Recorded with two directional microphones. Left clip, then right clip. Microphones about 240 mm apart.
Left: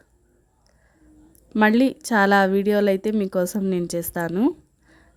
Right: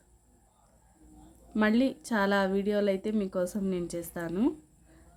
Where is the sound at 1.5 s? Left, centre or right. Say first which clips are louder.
Left 9 dB; left.